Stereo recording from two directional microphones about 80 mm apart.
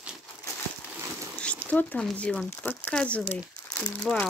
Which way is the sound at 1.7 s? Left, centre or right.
Centre.